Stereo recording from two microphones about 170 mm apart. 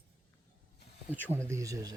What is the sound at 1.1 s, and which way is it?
Speech, 10° right (ahead or behind).